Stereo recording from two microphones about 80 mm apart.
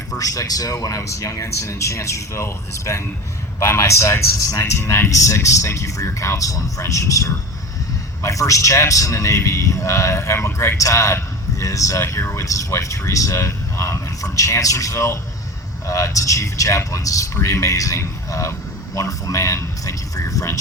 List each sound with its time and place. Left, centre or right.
0.2 s a man's voice: left